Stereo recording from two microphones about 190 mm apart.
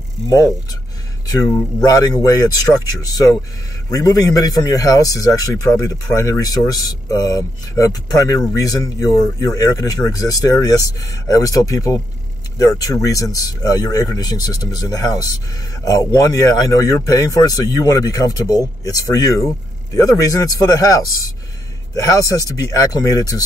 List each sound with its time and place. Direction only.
1.9 s speech: 20° left (ahead or behind)